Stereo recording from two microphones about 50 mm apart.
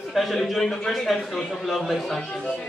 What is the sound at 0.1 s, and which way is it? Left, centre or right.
A man's voice, centre.